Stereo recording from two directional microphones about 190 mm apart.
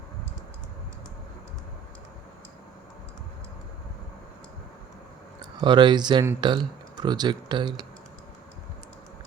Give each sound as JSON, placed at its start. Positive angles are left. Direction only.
{"t": 5.4, "sound": "speech", "side_deg": -25}